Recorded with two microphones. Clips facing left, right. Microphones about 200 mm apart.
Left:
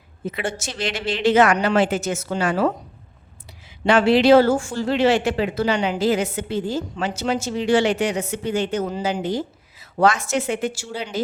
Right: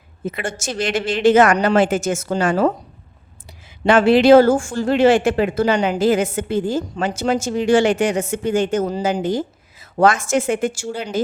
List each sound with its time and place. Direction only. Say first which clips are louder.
0.3 s speech: right 2 dB; 50° right (ahead or behind)
3.8 s speech: right 3 dB; 50° right (ahead or behind)